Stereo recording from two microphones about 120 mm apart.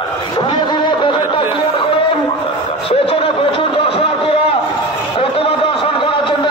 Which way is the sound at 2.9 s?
50° left (ahead or behind).